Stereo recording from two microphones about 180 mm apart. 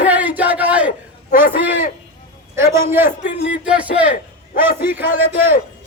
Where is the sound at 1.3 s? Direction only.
55° left (ahead or behind).